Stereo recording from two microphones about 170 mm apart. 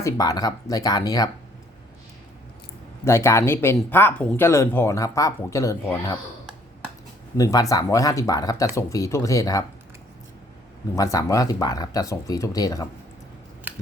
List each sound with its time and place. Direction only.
0.0 s speech: 20° left (ahead or behind)
3.0 s speech: 15° left (ahead or behind)
7.3 s speech: 20° left (ahead or behind)
10.9 s speech: 20° left (ahead or behind)